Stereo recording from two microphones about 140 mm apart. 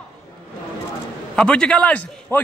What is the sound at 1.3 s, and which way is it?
A man's voice, 5° left (ahead or behind).